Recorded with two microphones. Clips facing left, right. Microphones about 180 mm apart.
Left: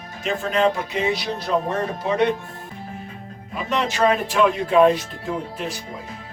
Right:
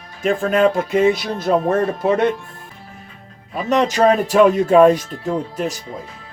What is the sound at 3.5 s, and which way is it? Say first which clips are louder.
Speech: right 7 dB; 40° right (ahead or behind).